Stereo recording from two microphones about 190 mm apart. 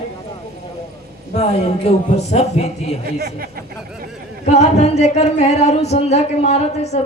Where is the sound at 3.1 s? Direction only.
55° right (ahead or behind).